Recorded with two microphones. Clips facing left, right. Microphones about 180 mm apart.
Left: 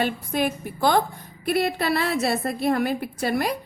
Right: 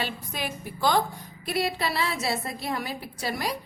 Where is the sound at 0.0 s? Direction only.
55° left (ahead or behind).